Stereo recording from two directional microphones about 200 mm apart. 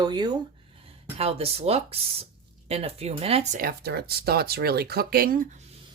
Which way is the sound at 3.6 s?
50° right (ahead or behind).